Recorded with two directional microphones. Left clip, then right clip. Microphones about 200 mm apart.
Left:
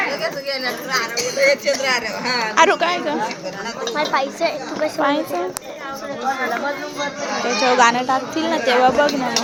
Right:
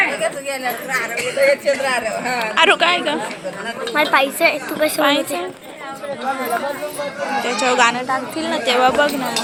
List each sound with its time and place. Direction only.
0.6 s speech: 40° left (ahead or behind)
2.6 s speech: 10° left (ahead or behind)
3.9 s a woman's voice: 30° right (ahead or behind)
4.9 s speech: 15° left (ahead or behind)
7.6 s speech: 10° left (ahead or behind)
7.9 s speech: 25° left (ahead or behind)